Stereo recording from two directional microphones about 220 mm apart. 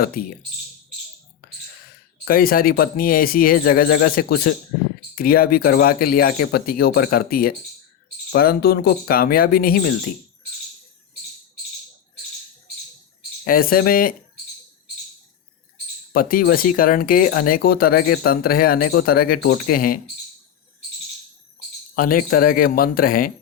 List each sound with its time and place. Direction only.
0.0 s speech: 40° left (ahead or behind)
2.2 s speech: 40° left (ahead or behind)
13.4 s speech: 40° left (ahead or behind)
16.1 s speech: 40° left (ahead or behind)
21.9 s speech: 40° left (ahead or behind)